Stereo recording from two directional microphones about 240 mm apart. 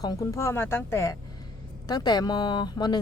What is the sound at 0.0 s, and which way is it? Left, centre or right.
Speech, centre.